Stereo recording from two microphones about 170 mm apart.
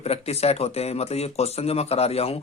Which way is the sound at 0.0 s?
35° left (ahead or behind).